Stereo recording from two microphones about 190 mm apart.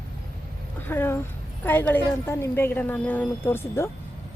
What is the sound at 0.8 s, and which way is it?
A woman's voice, 10° left (ahead or behind).